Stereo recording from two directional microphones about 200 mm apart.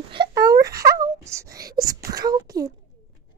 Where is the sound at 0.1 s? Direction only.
25° right (ahead or behind).